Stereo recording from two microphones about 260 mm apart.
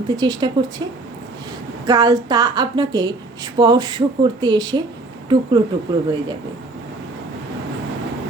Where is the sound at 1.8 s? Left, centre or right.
Centre.